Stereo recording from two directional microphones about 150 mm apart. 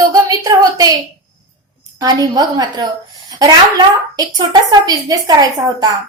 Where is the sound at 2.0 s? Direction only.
25° right (ahead or behind).